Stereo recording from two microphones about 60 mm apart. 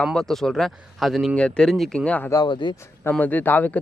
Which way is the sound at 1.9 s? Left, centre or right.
Centre.